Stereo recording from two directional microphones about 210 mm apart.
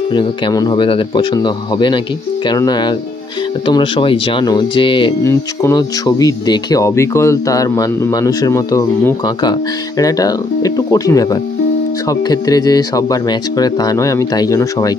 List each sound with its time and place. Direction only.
0.1 s speech: 20° left (ahead or behind)